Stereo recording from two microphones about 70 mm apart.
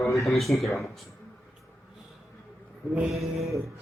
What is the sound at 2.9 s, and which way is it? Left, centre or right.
Speech, centre.